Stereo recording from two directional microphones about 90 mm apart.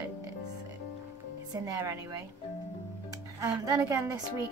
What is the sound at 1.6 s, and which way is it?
Speech, 35° right (ahead or behind).